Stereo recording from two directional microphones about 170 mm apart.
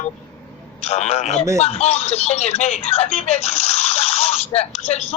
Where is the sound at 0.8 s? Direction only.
40° left (ahead or behind).